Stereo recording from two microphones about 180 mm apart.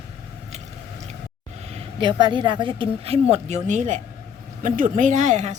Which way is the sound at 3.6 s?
45° right (ahead or behind).